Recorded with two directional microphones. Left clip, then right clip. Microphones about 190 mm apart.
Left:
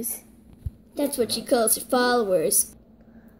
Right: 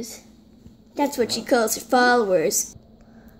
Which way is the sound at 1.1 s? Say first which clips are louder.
Right 1 dB; 10° right (ahead or behind).